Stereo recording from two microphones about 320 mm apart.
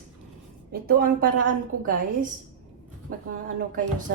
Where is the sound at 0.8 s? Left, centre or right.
Right.